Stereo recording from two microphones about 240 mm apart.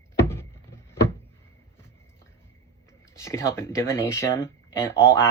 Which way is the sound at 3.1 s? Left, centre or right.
Centre.